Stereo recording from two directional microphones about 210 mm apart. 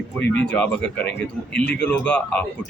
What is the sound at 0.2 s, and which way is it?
A man's voice, 5° left (ahead or behind).